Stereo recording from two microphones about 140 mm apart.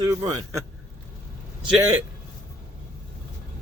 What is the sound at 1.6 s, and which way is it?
Speech, 5° right (ahead or behind).